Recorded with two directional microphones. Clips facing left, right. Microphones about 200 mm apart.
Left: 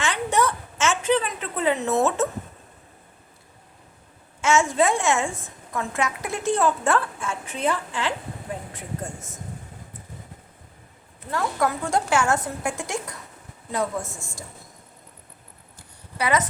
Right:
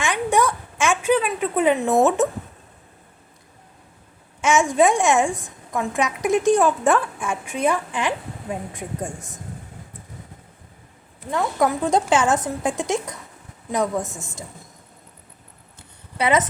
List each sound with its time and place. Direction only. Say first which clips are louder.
0.0 s a sound: right 3 dB; 15° right (ahead or behind)
4.4 s a woman's voice: right 3 dB; 15° right (ahead or behind)
11.3 s a woman's voice: right 3 dB; 20° right (ahead or behind)
16.1 s speech: right 4 dB; 20° right (ahead or behind)